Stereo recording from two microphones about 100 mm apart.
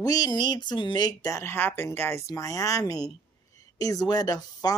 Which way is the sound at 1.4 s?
20° left (ahead or behind).